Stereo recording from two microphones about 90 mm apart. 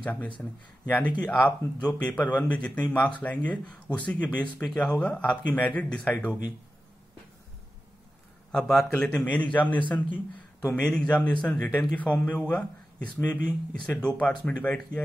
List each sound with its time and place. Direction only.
0.0 s speech: 15° left (ahead or behind)
8.5 s a man's voice: 5° left (ahead or behind)